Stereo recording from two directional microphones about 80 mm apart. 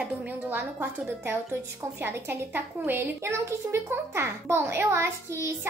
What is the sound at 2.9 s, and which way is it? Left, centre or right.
A child's voice, right.